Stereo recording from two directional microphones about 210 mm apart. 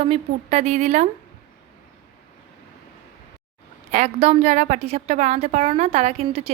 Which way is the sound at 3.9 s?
30° right (ahead or behind).